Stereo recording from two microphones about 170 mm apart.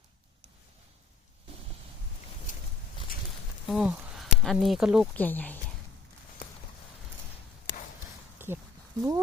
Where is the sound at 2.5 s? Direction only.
50° left (ahead or behind).